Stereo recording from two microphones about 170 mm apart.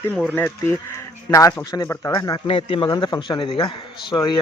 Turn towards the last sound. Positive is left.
turn(degrees=25)  # may be behind; listen again after turning